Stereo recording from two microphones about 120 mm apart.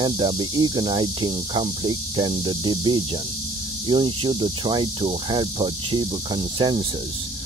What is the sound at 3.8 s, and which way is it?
Cricket, 40° right (ahead or behind).